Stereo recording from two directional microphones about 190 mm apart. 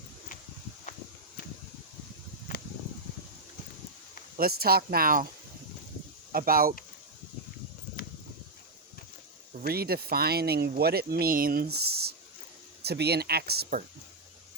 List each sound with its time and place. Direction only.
4.4 s speech: 50° right (ahead or behind)
6.3 s speech: 50° right (ahead or behind)
9.5 s speech: 55° right (ahead or behind)